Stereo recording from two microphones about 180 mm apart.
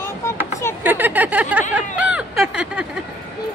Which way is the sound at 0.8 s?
10° right (ahead or behind).